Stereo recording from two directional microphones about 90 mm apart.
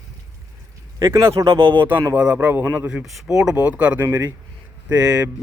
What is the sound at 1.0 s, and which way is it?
Speech, 35° right (ahead or behind).